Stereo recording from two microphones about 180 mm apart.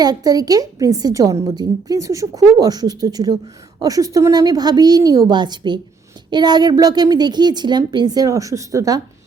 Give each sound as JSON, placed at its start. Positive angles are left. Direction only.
{"t": 0.0, "sound": "a woman's voice", "side_deg": -20}